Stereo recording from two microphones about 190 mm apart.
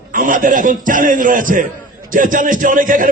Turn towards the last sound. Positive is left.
turn(degrees=-45)  # may be behind; listen again after turning